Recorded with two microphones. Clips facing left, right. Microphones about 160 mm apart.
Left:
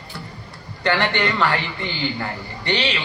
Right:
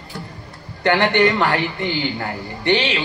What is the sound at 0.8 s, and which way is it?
A man's voice, 20° right (ahead or behind).